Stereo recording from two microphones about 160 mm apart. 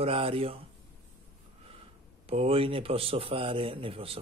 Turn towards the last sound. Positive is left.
turn(degrees=-35)  # may be behind; listen again after turning